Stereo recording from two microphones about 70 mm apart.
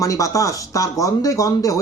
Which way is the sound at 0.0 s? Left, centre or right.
Left.